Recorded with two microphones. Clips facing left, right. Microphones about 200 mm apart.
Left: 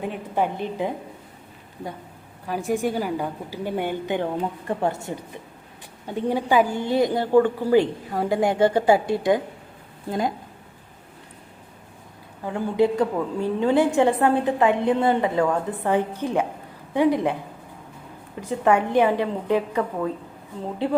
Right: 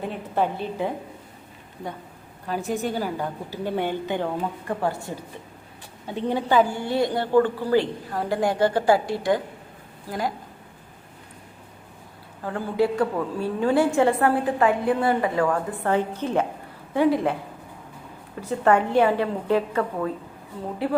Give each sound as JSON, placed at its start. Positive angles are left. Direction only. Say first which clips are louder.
{"t": 0.0, "sound": "a woman's voice", "louder": "even", "side_deg": 15}
{"t": 2.5, "sound": "a woman's voice", "louder": "left 2 dB", "side_deg": 10}
{"t": 6.1, "sound": "a woman's voice", "louder": "left 1 dB", "side_deg": 10}
{"t": 12.4, "sound": "a woman's voice", "louder": "left 2 dB", "side_deg": 15}
{"t": 18.3, "sound": "a woman's voice", "louder": "even", "side_deg": 15}